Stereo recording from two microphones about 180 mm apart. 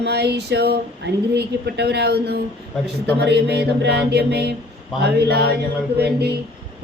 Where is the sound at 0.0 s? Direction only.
65° right (ahead or behind).